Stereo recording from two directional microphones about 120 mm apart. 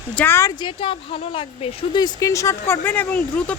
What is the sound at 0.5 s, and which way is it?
Speech, 45° left (ahead or behind).